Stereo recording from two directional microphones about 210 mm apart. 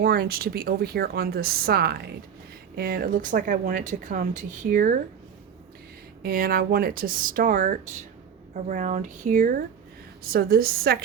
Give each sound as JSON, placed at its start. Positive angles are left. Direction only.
{"t": 0.0, "sound": "a woman's voice", "side_deg": -45}
{"t": 6.2, "sound": "a woman's voice", "side_deg": -45}